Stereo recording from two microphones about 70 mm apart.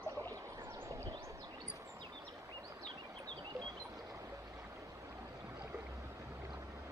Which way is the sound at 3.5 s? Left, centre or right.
Right.